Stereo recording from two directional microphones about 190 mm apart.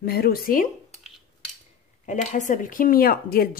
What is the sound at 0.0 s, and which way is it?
Speech, 55° left (ahead or behind).